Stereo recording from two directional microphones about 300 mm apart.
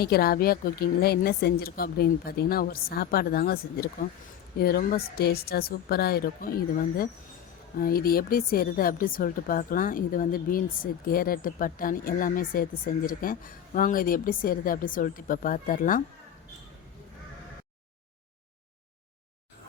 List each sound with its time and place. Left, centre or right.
0.0 s a woman's voice: left